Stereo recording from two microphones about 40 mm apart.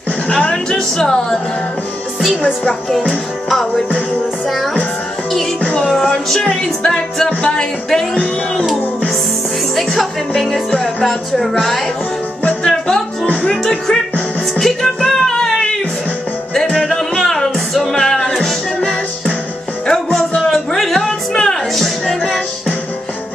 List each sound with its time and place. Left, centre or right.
0.3 s a woman's voice: centre
3.1 s music: centre
6.0 s speech: centre
7.2 s music: left
9.9 s a woman's voice: centre
12.6 s music: centre
19.9 s music: centre
21.0 s music: centre
21.7 s music: centre